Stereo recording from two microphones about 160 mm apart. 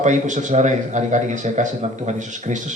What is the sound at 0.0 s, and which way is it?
A man's voice, 50° right (ahead or behind).